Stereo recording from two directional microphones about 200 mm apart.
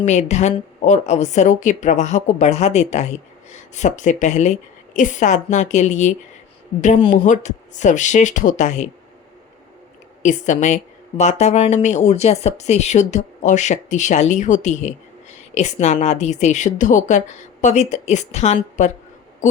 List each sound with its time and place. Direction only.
0.0 s speech: 35° left (ahead or behind)
10.2 s speech: 35° left (ahead or behind)
19.4 s owl: 35° left (ahead or behind)